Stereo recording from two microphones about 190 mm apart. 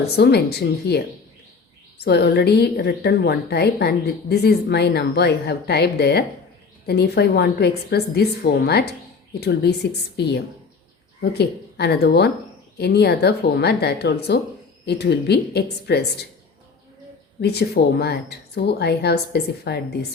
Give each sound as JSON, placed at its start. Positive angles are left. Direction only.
{"t": 0.0, "sound": "speech", "side_deg": 60}
{"t": 17.4, "sound": "speech", "side_deg": 60}